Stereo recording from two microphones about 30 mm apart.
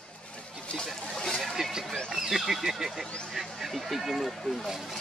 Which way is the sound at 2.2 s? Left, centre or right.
Centre.